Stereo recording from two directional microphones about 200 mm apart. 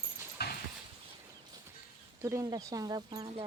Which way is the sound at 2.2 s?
15° right (ahead or behind).